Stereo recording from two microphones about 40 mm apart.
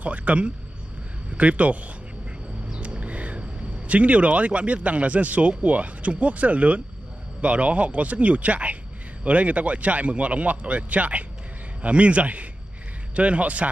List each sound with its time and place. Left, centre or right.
0.0 s speech: right
2.8 s speech: right